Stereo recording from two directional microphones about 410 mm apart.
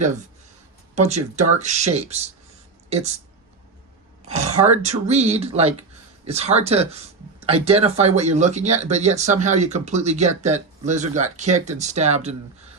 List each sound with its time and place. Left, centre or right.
0.9 s speech: centre
4.3 s speech: centre